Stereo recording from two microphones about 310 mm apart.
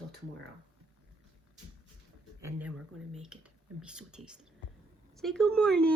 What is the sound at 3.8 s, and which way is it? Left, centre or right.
Speech, centre.